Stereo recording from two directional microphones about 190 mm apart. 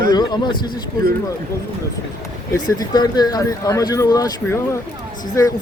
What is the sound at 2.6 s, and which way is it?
Speech, 20° left (ahead or behind).